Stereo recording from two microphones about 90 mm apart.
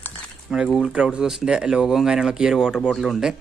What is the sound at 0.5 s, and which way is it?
Speech, 5° right (ahead or behind).